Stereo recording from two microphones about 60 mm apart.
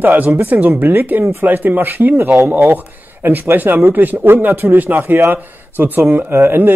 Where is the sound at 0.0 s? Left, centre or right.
Right.